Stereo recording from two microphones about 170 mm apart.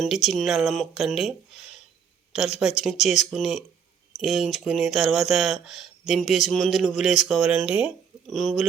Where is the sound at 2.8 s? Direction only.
Centre (ahead or behind).